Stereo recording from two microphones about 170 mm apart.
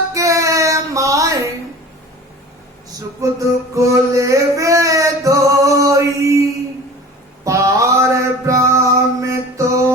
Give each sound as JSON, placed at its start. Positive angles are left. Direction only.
{"t": 0.1, "sound": "music", "side_deg": -20}
{"t": 3.2, "sound": "music", "side_deg": -20}
{"t": 7.4, "sound": "mantra", "side_deg": -20}